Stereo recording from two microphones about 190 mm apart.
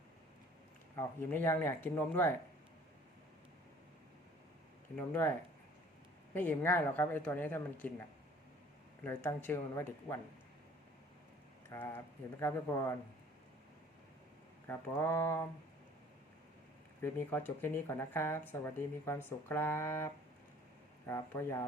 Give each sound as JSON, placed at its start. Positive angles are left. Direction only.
{"t": 0.9, "sound": "speech", "side_deg": 10}
{"t": 4.9, "sound": "speech", "side_deg": 10}
{"t": 6.3, "sound": "speech", "side_deg": 10}
{"t": 9.0, "sound": "speech", "side_deg": 10}
{"t": 11.7, "sound": "speech", "side_deg": 10}
{"t": 14.7, "sound": "speech", "side_deg": 15}
{"t": 17.0, "sound": "speech", "side_deg": 10}
{"t": 21.1, "sound": "speech", "side_deg": 15}